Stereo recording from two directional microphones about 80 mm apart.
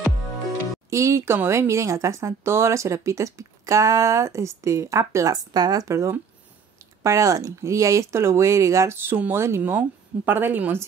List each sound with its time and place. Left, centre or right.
0.8 s speech: right
5.3 s a woman's voice: right